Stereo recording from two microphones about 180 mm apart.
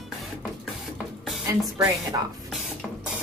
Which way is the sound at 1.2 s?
Centre (ahead or behind).